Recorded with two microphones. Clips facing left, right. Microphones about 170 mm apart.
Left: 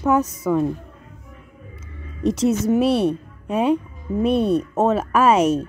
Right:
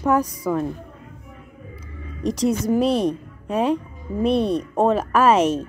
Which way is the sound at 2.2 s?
35° right (ahead or behind).